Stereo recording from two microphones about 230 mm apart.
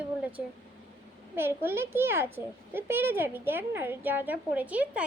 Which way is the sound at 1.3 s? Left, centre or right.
Centre.